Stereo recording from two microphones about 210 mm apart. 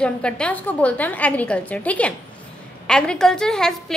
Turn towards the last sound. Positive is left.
turn(degrees=0)  # may be behind; listen again after turning